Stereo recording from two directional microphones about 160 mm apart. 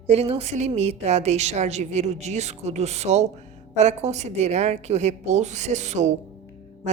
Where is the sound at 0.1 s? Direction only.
40° right (ahead or behind).